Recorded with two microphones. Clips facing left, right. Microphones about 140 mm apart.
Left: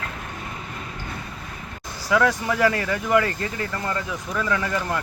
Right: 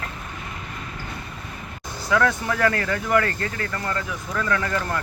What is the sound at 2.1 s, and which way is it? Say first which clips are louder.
Speech: left 1 dB; 10° left (ahead or behind).